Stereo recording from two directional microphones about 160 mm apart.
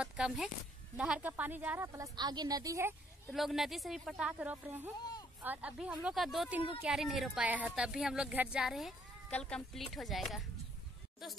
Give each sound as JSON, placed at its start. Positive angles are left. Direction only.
{"t": 0.0, "sound": "a woman's voice", "side_deg": -5}
{"t": 3.3, "sound": "a woman's voice", "side_deg": 0}